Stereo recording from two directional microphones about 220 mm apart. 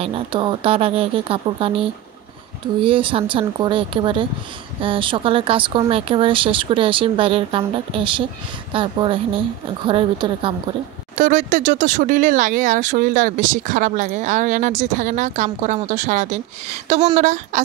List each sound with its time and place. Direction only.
0.0 s speech: 25° right (ahead or behind)
11.1 s speech: 35° right (ahead or behind)